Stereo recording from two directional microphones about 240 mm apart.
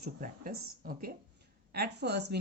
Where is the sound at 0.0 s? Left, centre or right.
Right.